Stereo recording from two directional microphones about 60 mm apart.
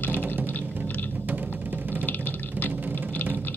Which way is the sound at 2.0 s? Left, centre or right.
Left.